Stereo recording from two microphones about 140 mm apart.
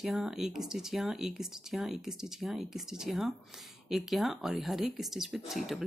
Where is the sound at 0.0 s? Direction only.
Centre (ahead or behind).